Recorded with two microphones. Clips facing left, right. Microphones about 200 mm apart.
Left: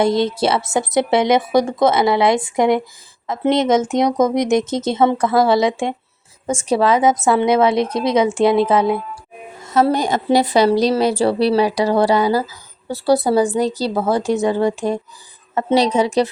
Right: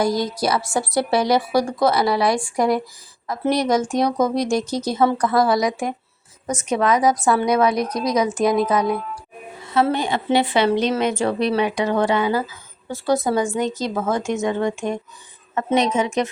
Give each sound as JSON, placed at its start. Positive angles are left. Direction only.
{"t": 0.0, "sound": "speech", "side_deg": 25}
{"t": 9.6, "sound": "a woman's voice", "side_deg": 40}